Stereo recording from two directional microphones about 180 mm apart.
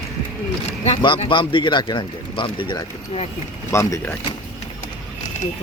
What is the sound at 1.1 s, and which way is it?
Speech, 30° left (ahead or behind).